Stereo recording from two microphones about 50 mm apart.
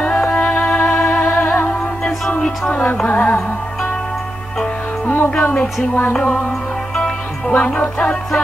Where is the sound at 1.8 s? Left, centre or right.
Centre.